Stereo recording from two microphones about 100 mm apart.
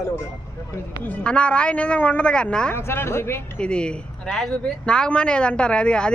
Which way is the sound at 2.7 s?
25° left (ahead or behind).